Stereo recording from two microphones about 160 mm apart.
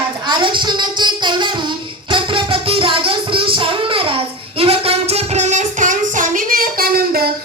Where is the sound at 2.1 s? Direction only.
30° right (ahead or behind).